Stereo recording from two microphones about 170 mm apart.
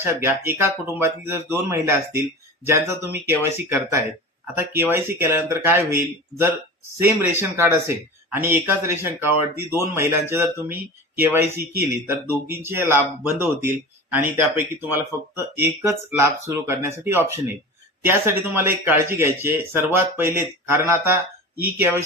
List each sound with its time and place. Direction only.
0.0 s speech: 15° right (ahead or behind)